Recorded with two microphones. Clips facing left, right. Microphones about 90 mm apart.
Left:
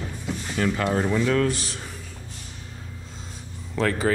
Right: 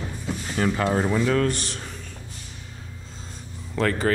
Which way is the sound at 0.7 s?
10° right (ahead or behind).